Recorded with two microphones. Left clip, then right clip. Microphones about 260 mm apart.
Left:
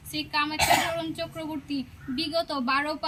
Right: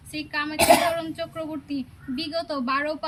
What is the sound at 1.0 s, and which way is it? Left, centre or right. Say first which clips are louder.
A woman's voice: right 2 dB; centre.